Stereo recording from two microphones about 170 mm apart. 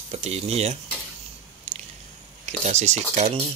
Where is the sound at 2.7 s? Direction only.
40° right (ahead or behind).